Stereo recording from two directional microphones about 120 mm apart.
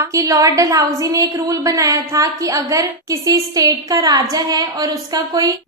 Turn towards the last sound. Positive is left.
turn(degrees=-30)  # may be behind; listen again after turning